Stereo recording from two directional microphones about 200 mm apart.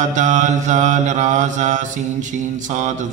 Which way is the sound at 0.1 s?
35° right (ahead or behind).